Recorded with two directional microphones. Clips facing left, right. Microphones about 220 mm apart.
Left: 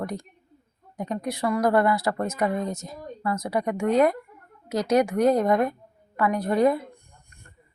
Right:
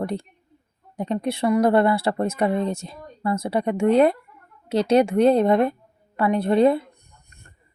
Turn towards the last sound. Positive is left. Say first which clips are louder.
# right 4 dB
turn(degrees=-30)  # may be behind; listen again after turning